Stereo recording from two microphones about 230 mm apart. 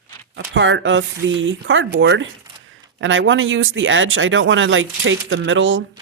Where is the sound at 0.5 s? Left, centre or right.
Right.